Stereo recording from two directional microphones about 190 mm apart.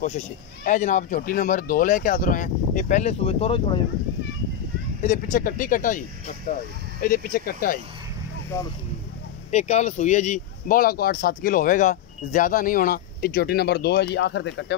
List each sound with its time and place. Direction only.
0.7 s speech: 40° left (ahead or behind)
5.0 s speech: 40° left (ahead or behind)
9.5 s speech: 35° left (ahead or behind); by 14.8 s 70° left (ahead or behind)